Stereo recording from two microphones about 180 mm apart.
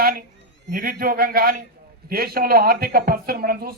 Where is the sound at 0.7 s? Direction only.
50° right (ahead or behind).